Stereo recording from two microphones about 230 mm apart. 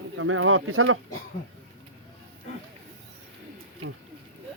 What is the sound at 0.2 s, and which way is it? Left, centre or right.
Speech, right.